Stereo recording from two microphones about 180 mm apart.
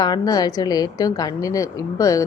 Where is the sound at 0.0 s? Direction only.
20° left (ahead or behind).